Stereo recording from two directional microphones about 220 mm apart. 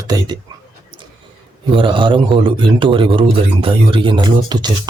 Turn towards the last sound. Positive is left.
turn(degrees=-20)  # may be behind; listen again after turning